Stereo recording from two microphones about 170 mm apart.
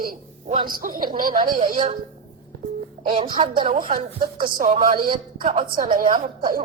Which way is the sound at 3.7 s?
55° right (ahead or behind).